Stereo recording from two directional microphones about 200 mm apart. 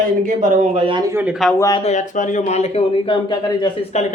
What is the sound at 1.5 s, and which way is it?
Speech, 15° left (ahead or behind).